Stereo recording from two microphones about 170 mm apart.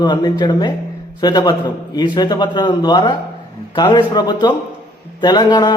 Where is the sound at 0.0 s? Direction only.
25° left (ahead or behind).